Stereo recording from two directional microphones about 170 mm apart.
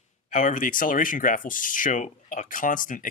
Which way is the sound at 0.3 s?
50° left (ahead or behind).